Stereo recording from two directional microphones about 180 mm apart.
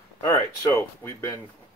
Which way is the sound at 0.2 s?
15° left (ahead or behind).